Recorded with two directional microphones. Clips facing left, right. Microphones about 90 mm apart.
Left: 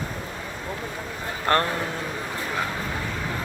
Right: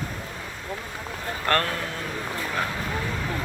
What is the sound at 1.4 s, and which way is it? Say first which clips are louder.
Speech: left 2 dB; 20° left (ahead or behind).